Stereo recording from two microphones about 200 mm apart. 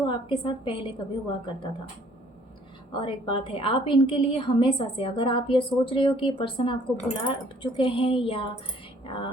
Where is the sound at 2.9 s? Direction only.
25° left (ahead or behind).